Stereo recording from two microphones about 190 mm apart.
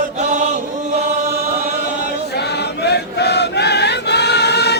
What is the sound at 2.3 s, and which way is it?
Choir, 60° left (ahead or behind).